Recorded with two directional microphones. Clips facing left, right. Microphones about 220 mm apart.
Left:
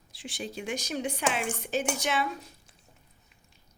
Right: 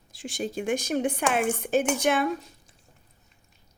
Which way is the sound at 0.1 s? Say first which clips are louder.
Right 6 dB; 45° right (ahead or behind).